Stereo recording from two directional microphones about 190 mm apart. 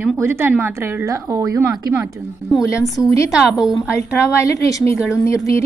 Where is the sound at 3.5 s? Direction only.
5° right (ahead or behind).